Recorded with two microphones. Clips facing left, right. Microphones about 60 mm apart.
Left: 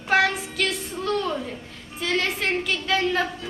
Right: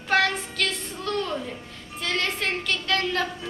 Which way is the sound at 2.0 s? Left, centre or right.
Centre.